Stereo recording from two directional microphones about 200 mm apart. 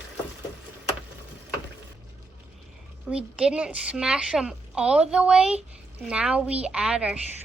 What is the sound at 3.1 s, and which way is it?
A woman's voice, 5° right (ahead or behind).